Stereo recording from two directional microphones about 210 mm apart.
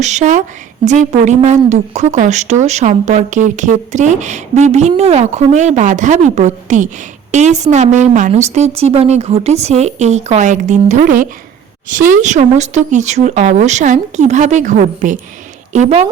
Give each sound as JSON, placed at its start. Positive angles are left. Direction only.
{"t": 0.0, "sound": "speech", "side_deg": -35}